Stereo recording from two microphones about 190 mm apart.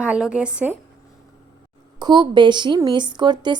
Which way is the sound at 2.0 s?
25° right (ahead or behind).